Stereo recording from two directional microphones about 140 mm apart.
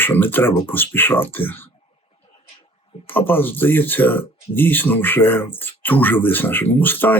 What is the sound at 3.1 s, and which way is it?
Speech, 15° left (ahead or behind).